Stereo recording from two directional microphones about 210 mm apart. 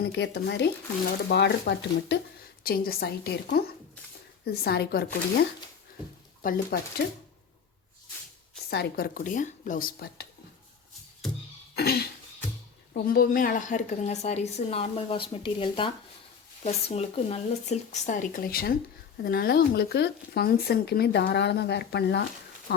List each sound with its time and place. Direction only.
0.0 s speech: 55° left (ahead or behind)
6.4 s speech: 45° left (ahead or behind)
8.7 s speech: 45° left (ahead or behind)
11.7 s cough: 50° left (ahead or behind)
12.9 s a woman's voice: 45° left (ahead or behind)